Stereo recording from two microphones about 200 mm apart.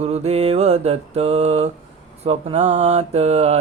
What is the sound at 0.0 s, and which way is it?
Mantra, 30° right (ahead or behind).